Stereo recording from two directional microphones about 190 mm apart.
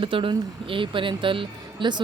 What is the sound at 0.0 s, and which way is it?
Speech, 25° right (ahead or behind).